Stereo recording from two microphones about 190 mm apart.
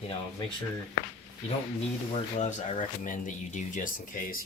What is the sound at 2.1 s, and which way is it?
Speech, 35° left (ahead or behind).